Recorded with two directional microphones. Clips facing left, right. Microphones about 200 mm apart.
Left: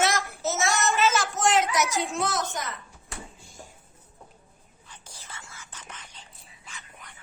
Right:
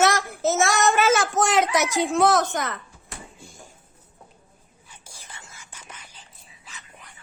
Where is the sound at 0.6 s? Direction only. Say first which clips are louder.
Right 3 dB; 65° right (ahead or behind).